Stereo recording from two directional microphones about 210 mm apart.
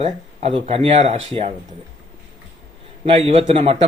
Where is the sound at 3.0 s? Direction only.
30° right (ahead or behind).